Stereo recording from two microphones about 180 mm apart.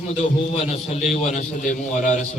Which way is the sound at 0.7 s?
35° left (ahead or behind).